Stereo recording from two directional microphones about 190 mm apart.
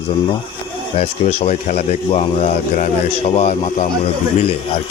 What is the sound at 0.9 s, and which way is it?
Speech, 35° left (ahead or behind).